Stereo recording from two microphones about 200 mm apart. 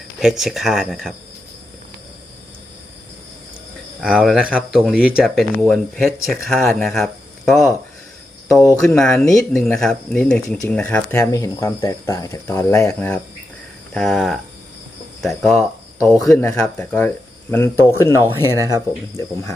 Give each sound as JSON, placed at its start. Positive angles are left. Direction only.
{"t": 0.2, "sound": "speech", "side_deg": 0}
{"t": 4.0, "sound": "speech", "side_deg": -5}
{"t": 13.9, "sound": "speech", "side_deg": 0}
{"t": 18.5, "sound": "speech", "side_deg": -15}